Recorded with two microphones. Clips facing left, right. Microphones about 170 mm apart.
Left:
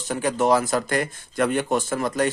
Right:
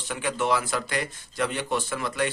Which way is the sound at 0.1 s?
40° left (ahead or behind).